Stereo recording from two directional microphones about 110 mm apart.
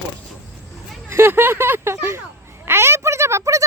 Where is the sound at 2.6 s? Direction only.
20° right (ahead or behind).